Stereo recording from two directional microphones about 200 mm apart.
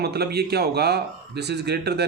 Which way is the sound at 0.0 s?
55° right (ahead or behind).